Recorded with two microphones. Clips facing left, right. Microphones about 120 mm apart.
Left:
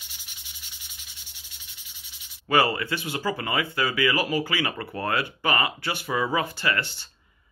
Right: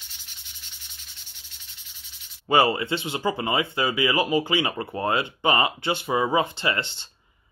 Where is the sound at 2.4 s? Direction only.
25° right (ahead or behind).